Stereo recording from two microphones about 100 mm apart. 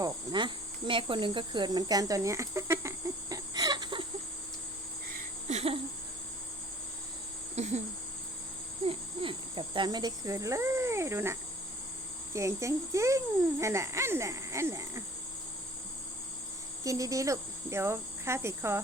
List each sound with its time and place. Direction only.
0.0 s cricket: 50° right (ahead or behind)
5.5 s a sound: 85° right
7.5 s a sound: 90° right
8.8 s cricket: 65° right (ahead or behind); by 11.3 s 25° right (ahead or behind)
12.3 s a child's voice: 30° right (ahead or behind)
16.8 s speech: 35° right (ahead or behind)